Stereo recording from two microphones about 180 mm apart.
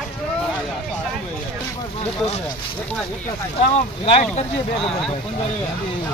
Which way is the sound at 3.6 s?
35° left (ahead or behind).